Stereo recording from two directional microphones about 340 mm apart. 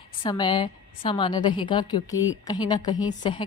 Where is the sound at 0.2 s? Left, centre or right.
Centre.